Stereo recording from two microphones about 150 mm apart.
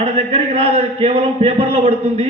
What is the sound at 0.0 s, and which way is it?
A man's voice, 45° right (ahead or behind).